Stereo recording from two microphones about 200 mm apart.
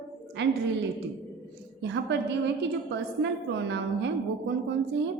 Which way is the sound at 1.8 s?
65° right (ahead or behind).